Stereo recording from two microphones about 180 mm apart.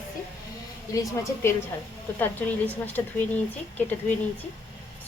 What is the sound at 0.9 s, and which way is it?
A woman's voice, 20° left (ahead or behind).